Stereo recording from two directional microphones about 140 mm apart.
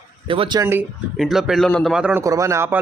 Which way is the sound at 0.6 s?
15° right (ahead or behind).